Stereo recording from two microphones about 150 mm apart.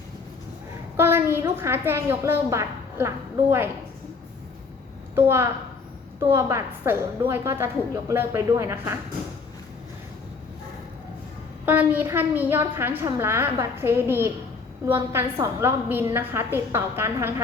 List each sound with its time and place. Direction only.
0.9 s a woman's voice: 15° right (ahead or behind)
5.1 s a woman's voice: 15° right (ahead or behind)
11.6 s a woman's voice: 10° right (ahead or behind)